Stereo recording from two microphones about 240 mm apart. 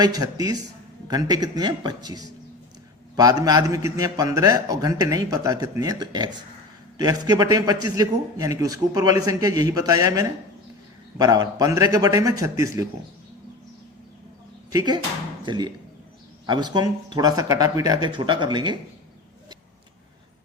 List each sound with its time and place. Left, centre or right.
0.0 s a man's voice: centre
14.7 s a man's voice: centre